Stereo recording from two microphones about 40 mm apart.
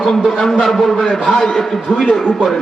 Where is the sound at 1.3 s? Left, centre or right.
Centre.